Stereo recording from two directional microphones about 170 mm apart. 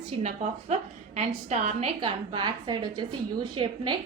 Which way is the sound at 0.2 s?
40° right (ahead or behind).